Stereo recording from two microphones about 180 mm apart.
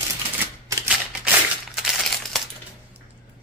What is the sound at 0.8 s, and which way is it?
Crumpling, 5° right (ahead or behind).